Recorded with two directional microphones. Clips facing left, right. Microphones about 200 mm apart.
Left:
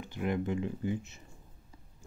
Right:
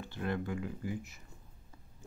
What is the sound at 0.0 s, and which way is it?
Speech, 15° left (ahead or behind).